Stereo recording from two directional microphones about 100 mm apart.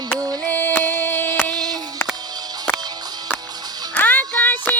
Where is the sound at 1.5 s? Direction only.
40° right (ahead or behind).